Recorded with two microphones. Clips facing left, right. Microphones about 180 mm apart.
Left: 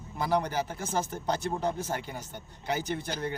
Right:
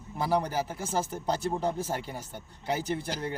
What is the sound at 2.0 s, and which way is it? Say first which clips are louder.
Speech: right 1 dB; 30° right (ahead or behind).